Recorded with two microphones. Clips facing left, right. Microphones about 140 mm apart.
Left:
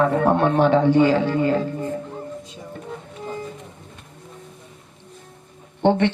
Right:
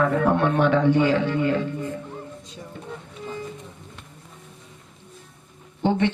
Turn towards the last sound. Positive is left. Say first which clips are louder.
# left 4 dB
turn(degrees=65)  # may be behind; listen again after turning